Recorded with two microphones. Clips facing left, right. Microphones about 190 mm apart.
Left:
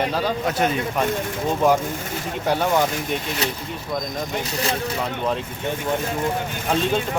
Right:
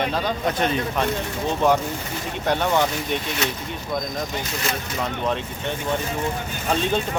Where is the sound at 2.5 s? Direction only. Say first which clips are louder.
Left 1 dB; 5° left (ahead or behind).